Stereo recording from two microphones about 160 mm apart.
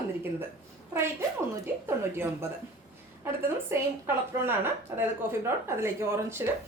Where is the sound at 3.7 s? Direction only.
15° right (ahead or behind).